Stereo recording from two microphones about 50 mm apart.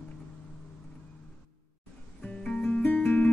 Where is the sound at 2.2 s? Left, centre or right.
Left.